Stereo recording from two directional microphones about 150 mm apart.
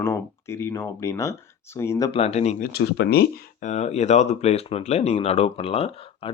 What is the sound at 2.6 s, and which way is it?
Speech, 90° left.